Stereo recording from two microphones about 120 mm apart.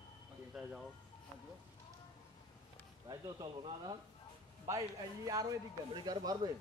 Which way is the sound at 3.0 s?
35° right (ahead or behind).